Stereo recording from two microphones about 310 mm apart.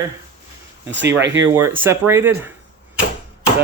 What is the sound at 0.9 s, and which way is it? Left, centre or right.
Speech, right.